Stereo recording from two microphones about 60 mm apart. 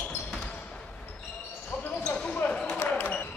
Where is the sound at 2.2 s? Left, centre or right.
Left.